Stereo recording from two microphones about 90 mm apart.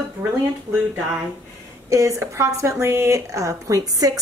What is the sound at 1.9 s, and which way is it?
A woman's voice, 35° right (ahead or behind).